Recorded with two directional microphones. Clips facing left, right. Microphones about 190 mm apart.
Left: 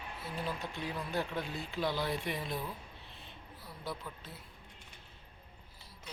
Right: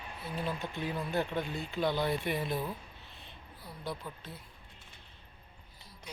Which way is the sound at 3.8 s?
Centre (ahead or behind).